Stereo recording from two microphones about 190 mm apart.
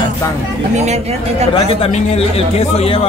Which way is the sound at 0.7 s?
35° right (ahead or behind).